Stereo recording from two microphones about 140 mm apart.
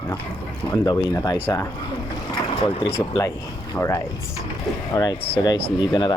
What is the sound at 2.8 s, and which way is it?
Speech, 30° left (ahead or behind).